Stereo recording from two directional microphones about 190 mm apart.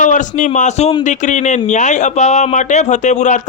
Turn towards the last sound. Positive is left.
turn(degrees=40)  # may be behind; listen again after turning